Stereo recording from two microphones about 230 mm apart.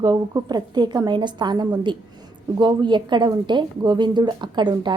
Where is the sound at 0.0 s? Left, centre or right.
Centre.